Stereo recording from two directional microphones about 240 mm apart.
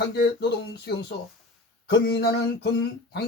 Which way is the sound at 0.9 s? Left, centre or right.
Left.